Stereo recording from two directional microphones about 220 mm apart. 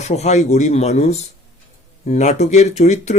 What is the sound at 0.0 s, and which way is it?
Speech, 30° left (ahead or behind).